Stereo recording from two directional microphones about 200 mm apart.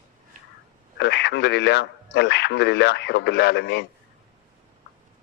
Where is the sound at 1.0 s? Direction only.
60° left (ahead or behind).